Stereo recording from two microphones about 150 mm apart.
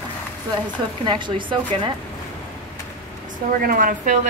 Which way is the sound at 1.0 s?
30° right (ahead or behind).